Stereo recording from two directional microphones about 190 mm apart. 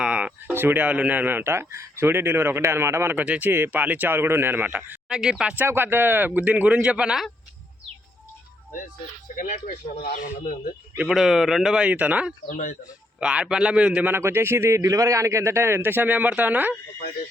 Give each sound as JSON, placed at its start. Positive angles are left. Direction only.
{"t": 0.0, "sound": "speech", "side_deg": -5}
{"t": 9.3, "sound": "speech", "side_deg": 45}
{"t": 10.9, "sound": "a man's voice", "side_deg": -5}
{"t": 12.5, "sound": "speech", "side_deg": 45}
{"t": 13.1, "sound": "speech", "side_deg": -5}